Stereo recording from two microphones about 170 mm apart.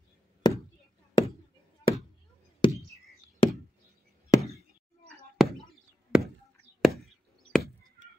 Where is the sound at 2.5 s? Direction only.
25° left (ahead or behind).